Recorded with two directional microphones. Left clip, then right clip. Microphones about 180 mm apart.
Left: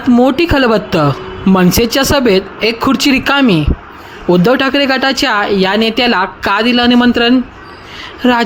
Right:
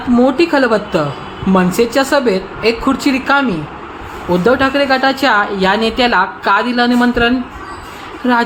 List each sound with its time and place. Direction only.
0.2 s speech: 45° left (ahead or behind)